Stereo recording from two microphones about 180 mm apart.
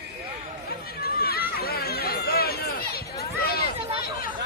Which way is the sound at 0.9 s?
60° left (ahead or behind).